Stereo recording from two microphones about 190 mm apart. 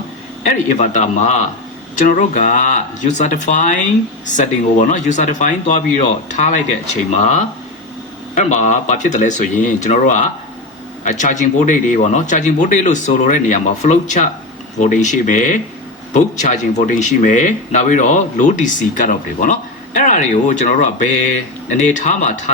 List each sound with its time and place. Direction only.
0.4 s speech: 40° left (ahead or behind)